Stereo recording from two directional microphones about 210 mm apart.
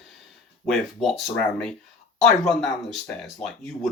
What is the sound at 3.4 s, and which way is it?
Speech, centre (ahead or behind).